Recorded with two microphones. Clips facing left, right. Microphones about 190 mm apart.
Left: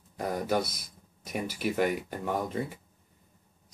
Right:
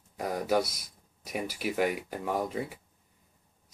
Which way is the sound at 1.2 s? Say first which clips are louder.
Left 1 dB; 5° right (ahead or behind).